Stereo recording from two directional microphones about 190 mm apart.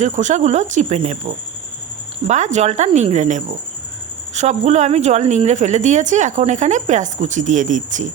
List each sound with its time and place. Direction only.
0.0 s a woman's voice: 40° right (ahead or behind)
2.2 s a woman's voice: 40° right (ahead or behind)